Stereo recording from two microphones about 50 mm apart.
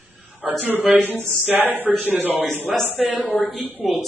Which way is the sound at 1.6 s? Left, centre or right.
Right.